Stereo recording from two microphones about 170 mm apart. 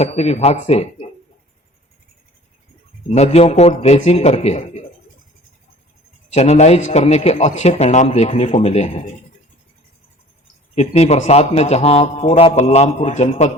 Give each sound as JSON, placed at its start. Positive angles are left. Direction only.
{"t": 0.0, "sound": "speech", "side_deg": 40}
{"t": 3.1, "sound": "speech", "side_deg": 35}
{"t": 6.3, "sound": "speech", "side_deg": 40}
{"t": 10.8, "sound": "speech", "side_deg": 40}